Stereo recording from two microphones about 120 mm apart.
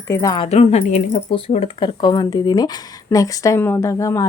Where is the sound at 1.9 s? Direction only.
40° left (ahead or behind).